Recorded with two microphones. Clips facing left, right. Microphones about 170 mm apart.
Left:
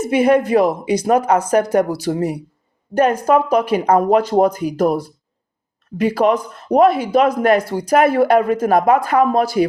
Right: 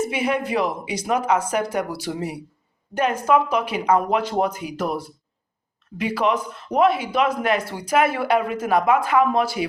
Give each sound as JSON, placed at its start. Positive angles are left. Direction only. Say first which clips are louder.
{"t": 0.1, "sound": "speech", "louder": "left 9 dB", "side_deg": 45}